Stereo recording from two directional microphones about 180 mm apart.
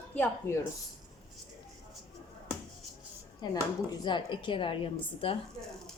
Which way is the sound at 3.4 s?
25° left (ahead or behind).